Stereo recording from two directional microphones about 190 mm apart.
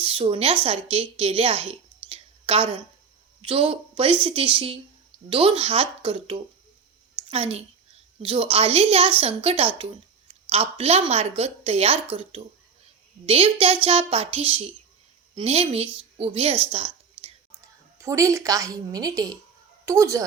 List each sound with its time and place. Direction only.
0.0 s a woman's voice: 30° right (ahead or behind)
17.9 s a child's voice: 15° right (ahead or behind)